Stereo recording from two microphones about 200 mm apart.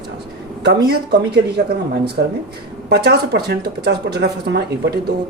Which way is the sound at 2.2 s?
60° right (ahead or behind).